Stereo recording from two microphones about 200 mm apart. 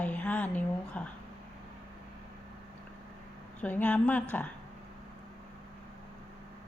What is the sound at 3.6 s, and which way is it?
Speech, 10° left (ahead or behind).